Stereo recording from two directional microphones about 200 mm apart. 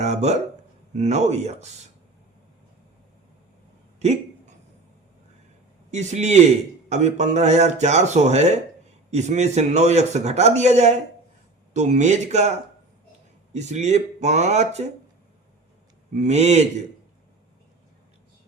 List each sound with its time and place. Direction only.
0.0 s a man's voice: 35° right (ahead or behind)
4.0 s a sound: 35° right (ahead or behind)
5.9 s a man's voice: 35° right (ahead or behind)
16.1 s a man's voice: 35° right (ahead or behind)